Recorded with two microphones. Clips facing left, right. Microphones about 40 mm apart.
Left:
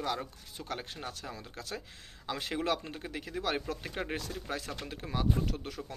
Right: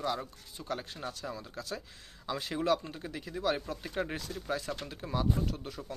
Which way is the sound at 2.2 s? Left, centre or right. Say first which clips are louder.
Right 2 dB; left.